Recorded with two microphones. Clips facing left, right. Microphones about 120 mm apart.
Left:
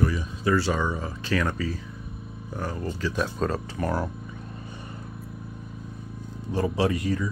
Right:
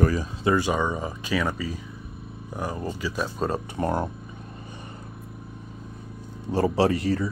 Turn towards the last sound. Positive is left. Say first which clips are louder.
# right 3 dB
turn(degrees=-30)  # may be behind; listen again after turning